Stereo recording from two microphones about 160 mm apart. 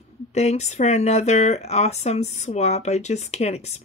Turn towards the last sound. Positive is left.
turn(degrees=45)  # may be behind; listen again after turning